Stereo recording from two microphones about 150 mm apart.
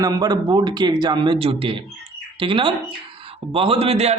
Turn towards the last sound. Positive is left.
turn(degrees=-45)  # may be behind; listen again after turning